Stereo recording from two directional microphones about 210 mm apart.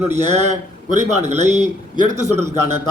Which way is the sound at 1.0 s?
35° right (ahead or behind).